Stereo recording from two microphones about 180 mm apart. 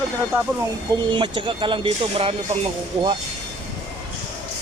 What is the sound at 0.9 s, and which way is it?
Speech, 25° right (ahead or behind).